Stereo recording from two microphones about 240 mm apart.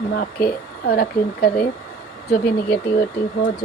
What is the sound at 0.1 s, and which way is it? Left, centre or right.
Speech, left.